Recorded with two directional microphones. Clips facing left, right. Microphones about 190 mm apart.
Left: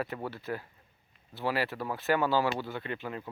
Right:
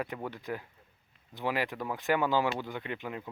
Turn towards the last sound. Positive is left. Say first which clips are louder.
# left 1 dB
turn(degrees=-15)  # may be behind; listen again after turning